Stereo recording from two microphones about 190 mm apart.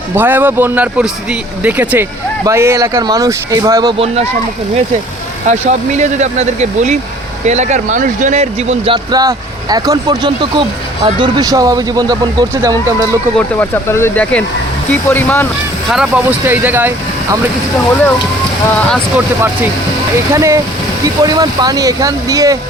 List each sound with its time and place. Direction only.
0.2 s speech: 10° right (ahead or behind); by 4.3 s 30° right (ahead or behind)
5.5 s speech: 40° right (ahead or behind); by 13.1 s 20° right (ahead or behind)
13.6 s speech: 10° left (ahead or behind)
15.9 s speech: 5° right (ahead or behind)
19.1 s speech: 10° right (ahead or behind)